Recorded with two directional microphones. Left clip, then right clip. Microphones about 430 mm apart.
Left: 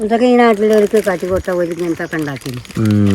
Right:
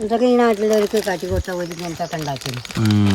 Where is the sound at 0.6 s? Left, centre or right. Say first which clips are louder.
Left 6 dB; left.